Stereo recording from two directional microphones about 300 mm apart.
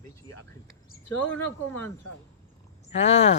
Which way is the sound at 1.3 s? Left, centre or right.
Centre.